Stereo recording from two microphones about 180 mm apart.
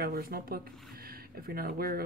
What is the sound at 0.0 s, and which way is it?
Speech, 55° right (ahead or behind).